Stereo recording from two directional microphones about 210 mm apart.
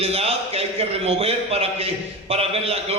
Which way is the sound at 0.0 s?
30° right (ahead or behind).